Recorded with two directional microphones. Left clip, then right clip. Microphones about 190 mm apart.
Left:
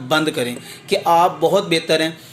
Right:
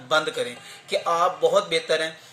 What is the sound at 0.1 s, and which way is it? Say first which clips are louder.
A man's voice: left 4 dB; 15° right (ahead or behind).